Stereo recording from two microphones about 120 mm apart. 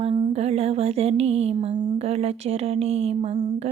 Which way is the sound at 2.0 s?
60° right (ahead or behind).